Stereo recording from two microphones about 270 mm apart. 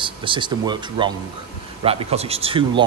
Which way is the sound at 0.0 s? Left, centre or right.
Centre.